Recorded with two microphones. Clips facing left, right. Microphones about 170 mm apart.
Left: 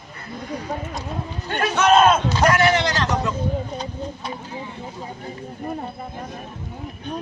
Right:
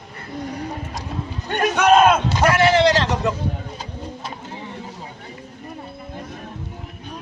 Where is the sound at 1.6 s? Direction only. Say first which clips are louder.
Right 1 dB; 15° right (ahead or behind).